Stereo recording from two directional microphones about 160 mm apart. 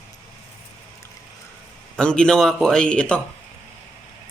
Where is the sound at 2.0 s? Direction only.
5° left (ahead or behind).